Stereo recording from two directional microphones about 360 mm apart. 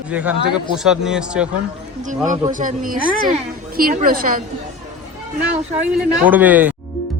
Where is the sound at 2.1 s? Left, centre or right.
Right.